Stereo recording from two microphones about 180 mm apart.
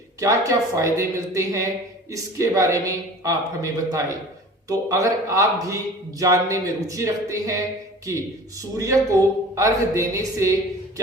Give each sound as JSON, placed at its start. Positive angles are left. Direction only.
{"t": 0.2, "sound": "speech", "side_deg": -15}